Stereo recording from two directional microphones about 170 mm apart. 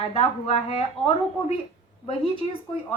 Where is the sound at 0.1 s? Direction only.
35° left (ahead or behind).